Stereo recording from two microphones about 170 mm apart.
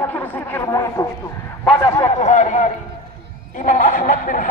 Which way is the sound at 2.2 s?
45° left (ahead or behind).